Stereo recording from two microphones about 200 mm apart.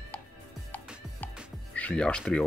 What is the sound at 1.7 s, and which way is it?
Speech, 5° left (ahead or behind).